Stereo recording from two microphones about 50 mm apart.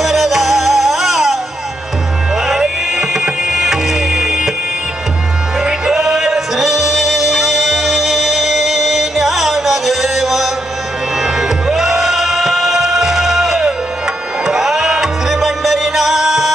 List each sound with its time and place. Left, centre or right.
0.0 s music: centre
2.4 s music: centre
5.6 s music: centre